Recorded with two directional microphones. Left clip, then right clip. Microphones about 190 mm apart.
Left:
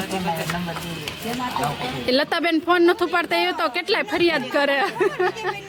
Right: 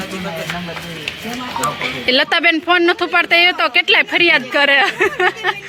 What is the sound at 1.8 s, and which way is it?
A woman's voice, 5° left (ahead or behind).